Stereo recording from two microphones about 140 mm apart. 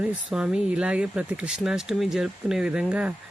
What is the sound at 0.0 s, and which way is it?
Speech, 10° right (ahead or behind).